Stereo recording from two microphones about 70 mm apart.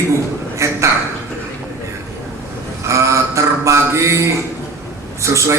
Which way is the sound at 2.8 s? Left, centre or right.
Right.